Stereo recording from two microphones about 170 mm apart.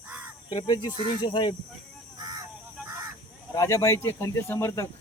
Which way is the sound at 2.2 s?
25° right (ahead or behind).